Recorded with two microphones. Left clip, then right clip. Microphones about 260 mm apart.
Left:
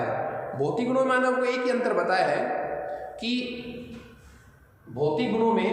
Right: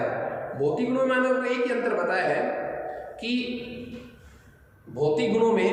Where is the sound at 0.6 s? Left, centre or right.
Left.